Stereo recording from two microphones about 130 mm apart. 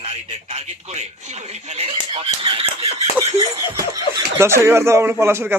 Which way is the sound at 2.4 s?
45° right (ahead or behind).